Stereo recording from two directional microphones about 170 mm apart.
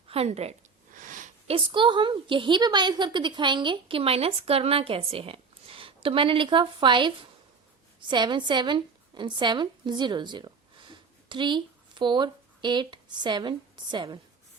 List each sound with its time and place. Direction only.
0.1 s a woman's voice: 35° right (ahead or behind)
0.9 s a sound: 50° right (ahead or behind)
1.5 s a woman's voice: 30° right (ahead or behind)